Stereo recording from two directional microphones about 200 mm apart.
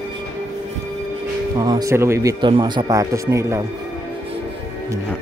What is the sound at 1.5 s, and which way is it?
Speech, 20° right (ahead or behind).